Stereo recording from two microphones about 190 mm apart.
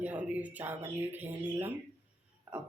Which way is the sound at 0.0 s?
10° right (ahead or behind).